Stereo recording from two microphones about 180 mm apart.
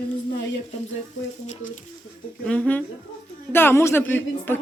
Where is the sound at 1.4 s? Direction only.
40° left (ahead or behind).